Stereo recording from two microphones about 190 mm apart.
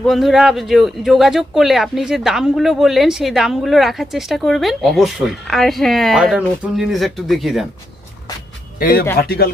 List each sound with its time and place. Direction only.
0.0 s speech: centre (ahead or behind)
8.8 s speech: 50° left (ahead or behind)